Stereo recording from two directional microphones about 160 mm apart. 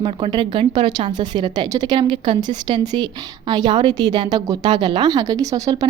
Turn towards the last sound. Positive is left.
turn(degrees=-20)  # may be behind; listen again after turning